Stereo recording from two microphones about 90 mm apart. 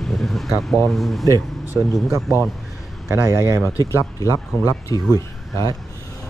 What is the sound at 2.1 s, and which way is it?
Speech, 30° right (ahead or behind).